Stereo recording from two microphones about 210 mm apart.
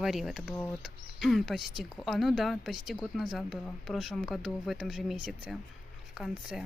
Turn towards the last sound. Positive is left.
turn(degrees=0)  # may be behind; listen again after turning